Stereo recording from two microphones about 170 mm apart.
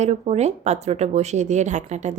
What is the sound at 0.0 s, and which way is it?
Speech, 40° right (ahead or behind).